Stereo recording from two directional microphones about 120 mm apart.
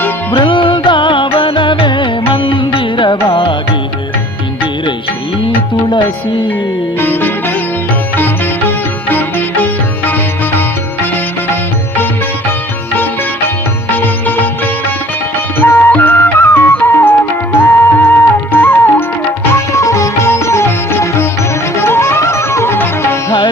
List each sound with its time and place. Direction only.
0.3 s music: 45° left (ahead or behind)
7.0 s music: 15° left (ahead or behind)
15.6 s music: 20° left (ahead or behind)